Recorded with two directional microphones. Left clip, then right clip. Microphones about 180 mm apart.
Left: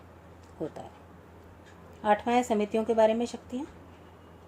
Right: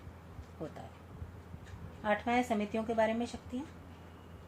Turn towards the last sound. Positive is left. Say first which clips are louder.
# left 7 dB
turn(degrees=50)  # may be behind; listen again after turning